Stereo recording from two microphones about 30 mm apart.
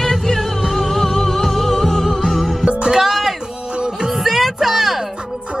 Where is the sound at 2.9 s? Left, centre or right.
Centre.